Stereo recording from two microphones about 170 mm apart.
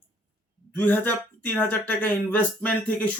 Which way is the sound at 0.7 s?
10° left (ahead or behind).